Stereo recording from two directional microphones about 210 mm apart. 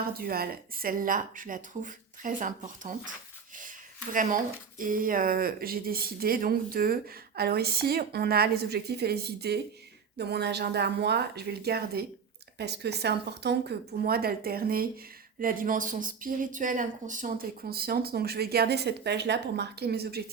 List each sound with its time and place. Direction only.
0.2 s speech: 45° right (ahead or behind)
3.6 s a sound: 40° right (ahead or behind)
4.8 s speech: 40° right (ahead or behind)